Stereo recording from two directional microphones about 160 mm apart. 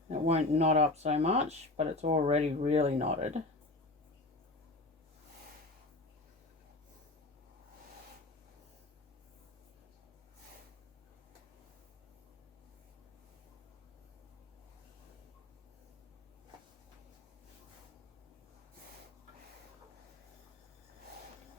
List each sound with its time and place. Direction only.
0.1 s speech: 40° right (ahead or behind)